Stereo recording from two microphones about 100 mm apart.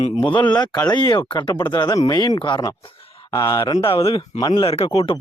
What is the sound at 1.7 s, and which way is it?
Speech, 40° left (ahead or behind).